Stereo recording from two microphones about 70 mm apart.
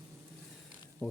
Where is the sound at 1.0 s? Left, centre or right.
Left.